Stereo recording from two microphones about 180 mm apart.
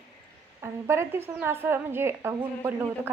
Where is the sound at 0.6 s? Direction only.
15° right (ahead or behind).